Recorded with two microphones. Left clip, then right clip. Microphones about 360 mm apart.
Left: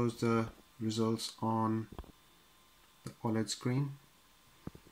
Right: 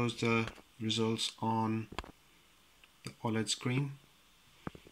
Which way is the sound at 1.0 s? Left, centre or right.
Centre.